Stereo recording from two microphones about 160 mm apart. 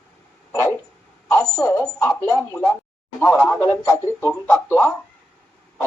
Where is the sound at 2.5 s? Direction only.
15° left (ahead or behind).